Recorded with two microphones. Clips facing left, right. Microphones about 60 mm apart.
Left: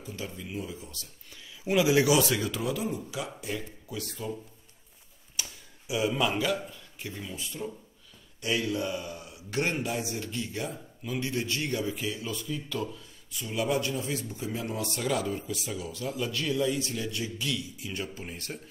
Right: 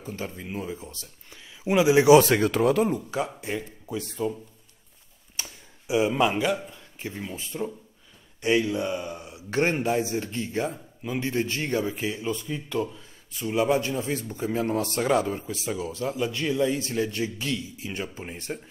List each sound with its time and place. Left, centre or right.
0.0 s speech: right
2.1 s a man's voice: right
5.3 s a man's voice: right